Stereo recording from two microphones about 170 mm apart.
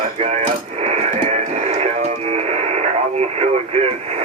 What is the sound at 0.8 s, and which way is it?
Radio, 40° right (ahead or behind).